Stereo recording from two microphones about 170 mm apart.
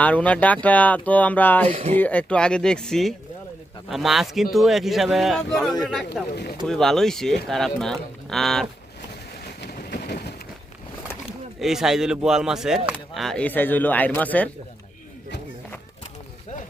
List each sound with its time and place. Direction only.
0.0 s speech: 10° left (ahead or behind)
1.7 s speech: 35° right (ahead or behind)
2.0 s speech: 10° left (ahead or behind)
6.3 s speech: 70° left (ahead or behind)
6.7 s speech: 5° left (ahead or behind)
9.6 s a sound: 70° left (ahead or behind)
11.6 s speech: 5° right (ahead or behind)